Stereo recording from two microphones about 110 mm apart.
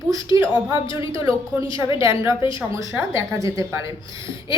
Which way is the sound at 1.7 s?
30° right (ahead or behind).